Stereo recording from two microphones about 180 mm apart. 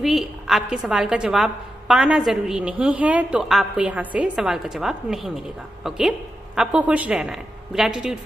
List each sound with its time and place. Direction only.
0.0 s a woman's voice: centre (ahead or behind)